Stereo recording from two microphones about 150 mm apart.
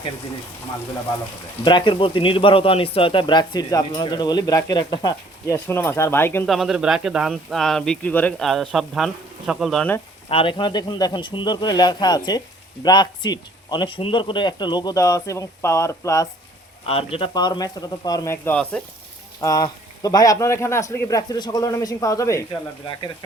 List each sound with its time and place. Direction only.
1.6 s speech: 30° left (ahead or behind)
5.6 s speech: 15° left (ahead or behind)
6.5 s speech: centre (ahead or behind)
10.2 s speech: 35° left (ahead or behind); by 16.3 s 20° left (ahead or behind)
16.8 s speech: 40° left (ahead or behind); by 18.5 s 20° left (ahead or behind)
18.5 s speech: 5° left (ahead or behind)
19.4 s speech: 25° left (ahead or behind)